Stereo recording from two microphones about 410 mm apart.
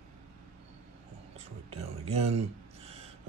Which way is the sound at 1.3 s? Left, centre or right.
Centre.